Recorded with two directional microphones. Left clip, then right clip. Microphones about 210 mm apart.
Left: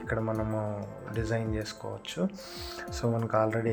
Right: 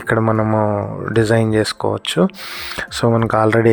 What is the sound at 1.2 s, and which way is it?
Speech, 50° right (ahead or behind).